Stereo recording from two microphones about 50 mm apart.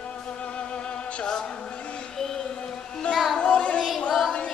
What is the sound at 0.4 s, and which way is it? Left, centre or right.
Music, left.